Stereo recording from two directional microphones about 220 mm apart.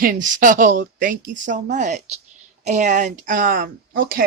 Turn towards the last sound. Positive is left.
turn(degrees=-40)  # may be behind; listen again after turning